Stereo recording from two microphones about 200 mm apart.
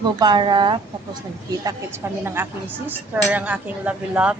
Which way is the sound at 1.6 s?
10° right (ahead or behind).